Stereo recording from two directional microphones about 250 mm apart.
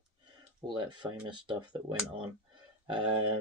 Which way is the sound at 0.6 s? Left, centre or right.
Centre.